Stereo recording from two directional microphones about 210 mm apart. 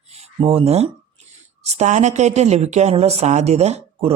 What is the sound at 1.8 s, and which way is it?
Speech, 35° right (ahead or behind).